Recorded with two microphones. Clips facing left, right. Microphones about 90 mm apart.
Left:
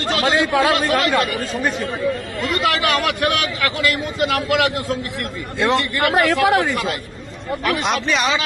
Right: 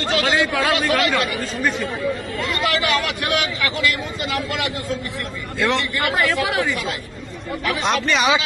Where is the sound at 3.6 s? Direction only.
55° left (ahead or behind).